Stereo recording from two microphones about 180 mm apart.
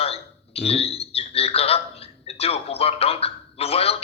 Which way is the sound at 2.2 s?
35° left (ahead or behind).